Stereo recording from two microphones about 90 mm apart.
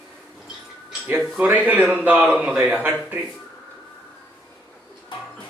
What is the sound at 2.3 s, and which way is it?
Speech, 10° right (ahead or behind).